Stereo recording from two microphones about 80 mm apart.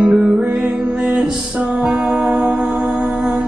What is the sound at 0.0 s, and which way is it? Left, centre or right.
Music, centre.